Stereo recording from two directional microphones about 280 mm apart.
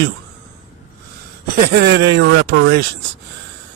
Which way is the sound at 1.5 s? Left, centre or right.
Right.